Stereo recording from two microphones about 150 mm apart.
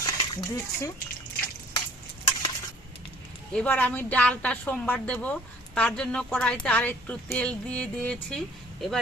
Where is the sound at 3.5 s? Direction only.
10° left (ahead or behind).